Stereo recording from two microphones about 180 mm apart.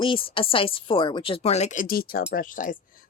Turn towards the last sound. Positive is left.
turn(degrees=45)  # may be behind; listen again after turning